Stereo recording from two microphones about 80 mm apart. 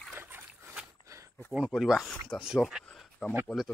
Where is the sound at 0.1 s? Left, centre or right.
Right.